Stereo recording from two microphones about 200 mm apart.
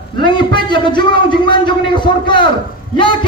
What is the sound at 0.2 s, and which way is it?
A man's voice, 25° left (ahead or behind).